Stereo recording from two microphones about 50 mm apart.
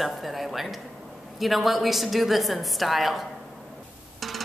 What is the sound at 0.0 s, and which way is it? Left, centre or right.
A woman's voice, centre.